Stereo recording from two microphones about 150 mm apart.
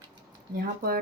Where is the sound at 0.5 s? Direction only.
85° right.